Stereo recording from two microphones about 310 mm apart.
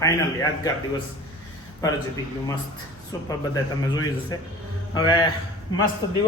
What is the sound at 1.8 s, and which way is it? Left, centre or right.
Speech, centre.